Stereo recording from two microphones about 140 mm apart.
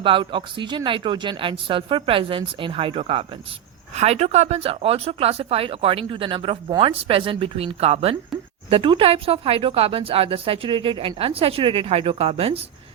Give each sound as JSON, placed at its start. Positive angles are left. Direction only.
{"t": 0.0, "sound": "speech", "side_deg": -40}